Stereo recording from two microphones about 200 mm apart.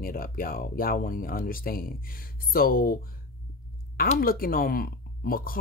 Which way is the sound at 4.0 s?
45° left (ahead or behind).